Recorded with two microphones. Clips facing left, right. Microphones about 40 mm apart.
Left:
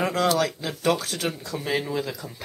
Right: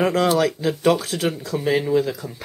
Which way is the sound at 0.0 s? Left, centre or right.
Centre.